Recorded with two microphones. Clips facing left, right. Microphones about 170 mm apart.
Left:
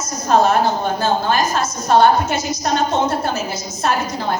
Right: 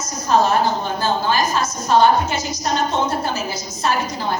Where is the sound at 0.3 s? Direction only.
50° left (ahead or behind).